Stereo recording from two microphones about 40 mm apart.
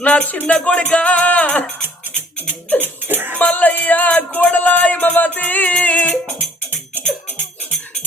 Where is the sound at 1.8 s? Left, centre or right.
Right.